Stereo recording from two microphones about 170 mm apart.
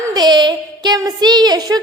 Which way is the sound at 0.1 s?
25° right (ahead or behind).